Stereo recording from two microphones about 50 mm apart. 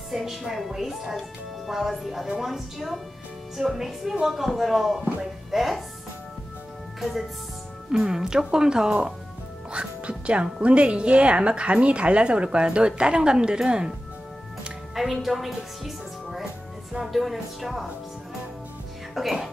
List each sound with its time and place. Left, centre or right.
0.1 s speech: centre
5.2 s music: centre
7.0 s speech: centre
9.7 s speech: right
15.2 s music: centre
16.9 s speech: centre
19.1 s speech: centre